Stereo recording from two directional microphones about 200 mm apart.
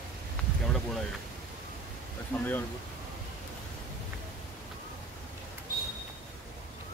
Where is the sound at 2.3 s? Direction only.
10° left (ahead or behind).